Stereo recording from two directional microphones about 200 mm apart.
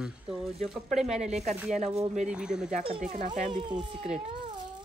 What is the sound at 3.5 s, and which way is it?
Speech, 25° right (ahead or behind).